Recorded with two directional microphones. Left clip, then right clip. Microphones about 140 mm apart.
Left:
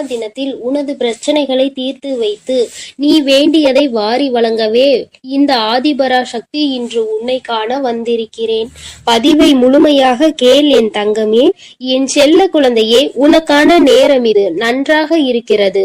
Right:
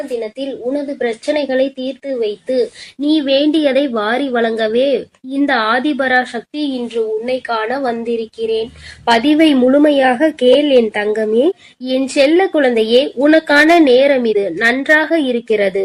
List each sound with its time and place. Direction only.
0.2 s a woman's voice: 35° left (ahead or behind)
3.2 s a woman's voice: 25° left (ahead or behind)
4.5 s a woman's voice: 15° left (ahead or behind)
4.9 s a woman's voice: 30° left (ahead or behind)